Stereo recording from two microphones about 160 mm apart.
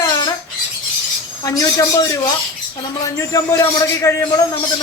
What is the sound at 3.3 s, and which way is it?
A man's voice, 20° left (ahead or behind).